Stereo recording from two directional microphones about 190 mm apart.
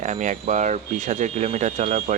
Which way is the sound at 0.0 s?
40° right (ahead or behind).